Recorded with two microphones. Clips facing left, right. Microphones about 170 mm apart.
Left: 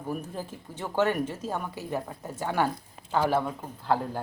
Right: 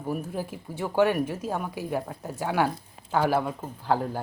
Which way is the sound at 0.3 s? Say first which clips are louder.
Right 4 dB; 10° right (ahead or behind).